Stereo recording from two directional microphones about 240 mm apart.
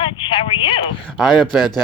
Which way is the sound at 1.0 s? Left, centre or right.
Centre.